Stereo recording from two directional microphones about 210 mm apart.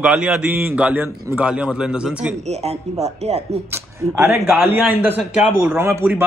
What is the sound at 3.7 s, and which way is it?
Speech, 10° right (ahead or behind).